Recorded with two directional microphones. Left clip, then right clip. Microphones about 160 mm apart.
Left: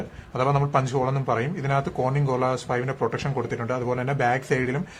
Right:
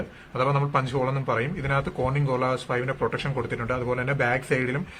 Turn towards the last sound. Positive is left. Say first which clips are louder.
# left 1 dB
turn(degrees=40)  # may be behind; listen again after turning